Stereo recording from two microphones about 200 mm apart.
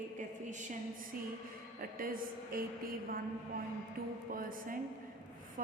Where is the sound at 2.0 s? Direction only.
45° right (ahead or behind).